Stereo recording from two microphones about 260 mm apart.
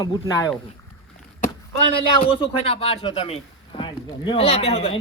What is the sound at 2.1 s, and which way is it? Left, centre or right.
A man's voice, left.